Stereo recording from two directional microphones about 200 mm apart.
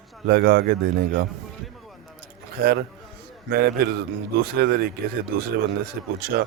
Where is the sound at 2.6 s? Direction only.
50° right (ahead or behind).